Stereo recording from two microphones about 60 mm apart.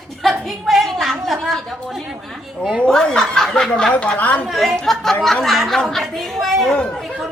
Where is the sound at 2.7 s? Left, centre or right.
Centre.